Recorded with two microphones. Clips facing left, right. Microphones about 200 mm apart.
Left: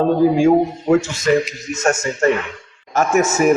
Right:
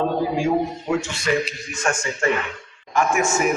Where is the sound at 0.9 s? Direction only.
40° left (ahead or behind).